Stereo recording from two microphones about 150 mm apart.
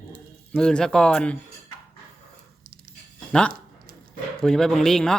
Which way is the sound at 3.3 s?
5° left (ahead or behind).